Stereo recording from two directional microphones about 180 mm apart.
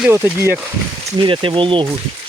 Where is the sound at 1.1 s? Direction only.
25° right (ahead or behind).